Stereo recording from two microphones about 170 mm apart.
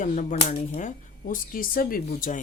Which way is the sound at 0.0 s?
50° left (ahead or behind).